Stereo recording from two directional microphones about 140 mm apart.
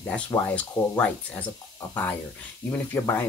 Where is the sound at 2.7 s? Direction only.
15° left (ahead or behind).